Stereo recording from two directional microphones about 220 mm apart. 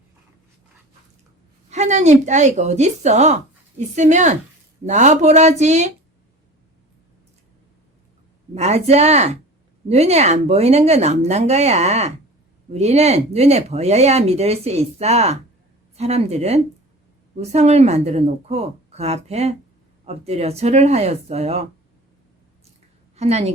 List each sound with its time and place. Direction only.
1.7 s speech: 30° right (ahead or behind)
8.5 s speech: 30° right (ahead or behind)
23.1 s a woman's voice: 30° right (ahead or behind)